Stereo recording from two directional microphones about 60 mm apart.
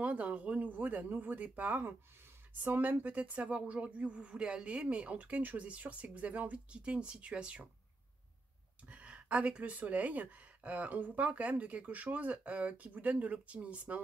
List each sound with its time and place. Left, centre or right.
0.0 s speech: right
8.8 s speech: right